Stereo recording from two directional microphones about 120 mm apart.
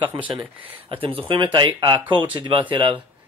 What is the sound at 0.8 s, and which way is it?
Speech, 50° right (ahead or behind).